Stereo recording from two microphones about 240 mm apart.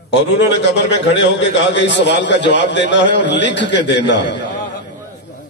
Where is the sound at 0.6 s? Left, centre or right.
Left.